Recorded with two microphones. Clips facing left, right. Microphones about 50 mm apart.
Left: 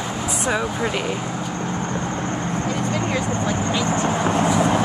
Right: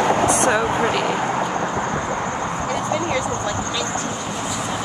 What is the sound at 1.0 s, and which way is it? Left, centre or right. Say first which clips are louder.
Speech: right 5 dB; right.